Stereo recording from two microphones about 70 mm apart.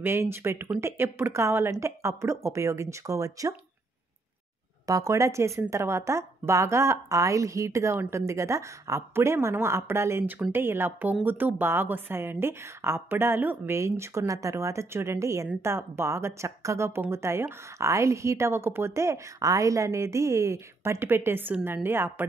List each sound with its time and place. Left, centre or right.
0.0 s a woman's voice: right
4.8 s a woman's voice: right
13.7 s a woman's voice: right